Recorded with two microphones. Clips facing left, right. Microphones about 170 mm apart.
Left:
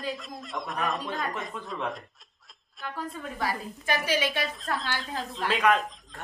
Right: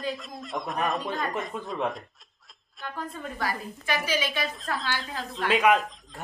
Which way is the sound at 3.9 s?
65° left (ahead or behind).